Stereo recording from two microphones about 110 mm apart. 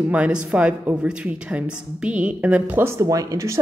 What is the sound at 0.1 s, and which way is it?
A woman's voice, 10° right (ahead or behind).